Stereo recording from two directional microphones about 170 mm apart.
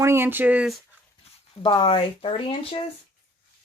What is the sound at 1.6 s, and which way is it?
Speech, 30° left (ahead or behind).